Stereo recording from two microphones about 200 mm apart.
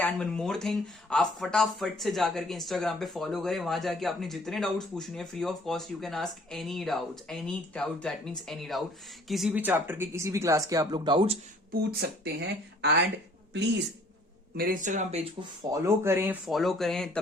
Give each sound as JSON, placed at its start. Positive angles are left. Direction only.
{"t": 0.0, "sound": "speech", "side_deg": 5}
{"t": 11.7, "sound": "speech", "side_deg": -50}
{"t": 14.5, "sound": "speech", "side_deg": -45}
{"t": 15.7, "sound": "speech", "side_deg": -10}
{"t": 16.5, "sound": "speech", "side_deg": 0}